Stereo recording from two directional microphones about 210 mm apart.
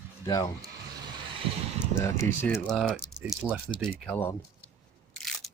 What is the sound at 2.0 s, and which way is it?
Speech, 15° left (ahead or behind).